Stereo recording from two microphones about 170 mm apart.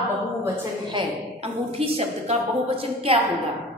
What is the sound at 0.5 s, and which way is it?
A woman's voice, 30° right (ahead or behind).